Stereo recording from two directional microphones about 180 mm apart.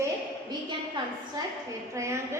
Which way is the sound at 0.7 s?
25° right (ahead or behind).